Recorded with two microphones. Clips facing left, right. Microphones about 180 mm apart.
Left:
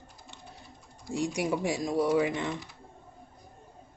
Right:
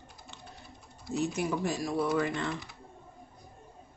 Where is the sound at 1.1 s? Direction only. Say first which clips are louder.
Left 1 dB; 10° left (ahead or behind).